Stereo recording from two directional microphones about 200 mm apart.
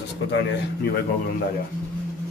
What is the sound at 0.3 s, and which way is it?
Speech, 55° left (ahead or behind).